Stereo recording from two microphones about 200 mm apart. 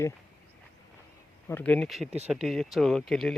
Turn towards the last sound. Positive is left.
turn(degrees=0)  # may be behind; listen again after turning